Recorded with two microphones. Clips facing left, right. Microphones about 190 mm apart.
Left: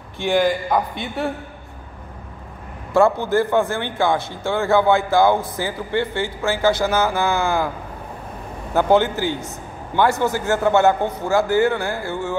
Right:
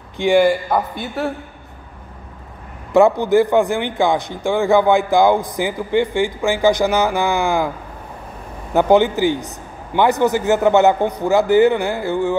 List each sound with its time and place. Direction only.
0.2 s a man's voice: 10° right (ahead or behind)
2.9 s a man's voice: 20° right (ahead or behind)
8.7 s a man's voice: 15° right (ahead or behind)